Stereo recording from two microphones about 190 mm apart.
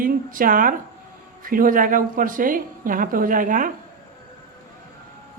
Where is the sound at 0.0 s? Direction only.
45° right (ahead or behind).